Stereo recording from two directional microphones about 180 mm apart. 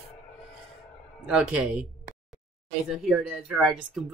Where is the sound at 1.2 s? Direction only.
5° right (ahead or behind).